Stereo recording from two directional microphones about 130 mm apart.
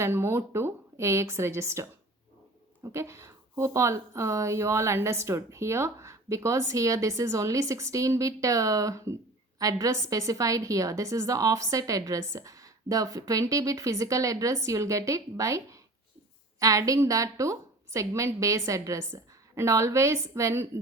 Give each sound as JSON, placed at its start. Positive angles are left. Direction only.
{"t": 0.0, "sound": "a woman's voice", "side_deg": -20}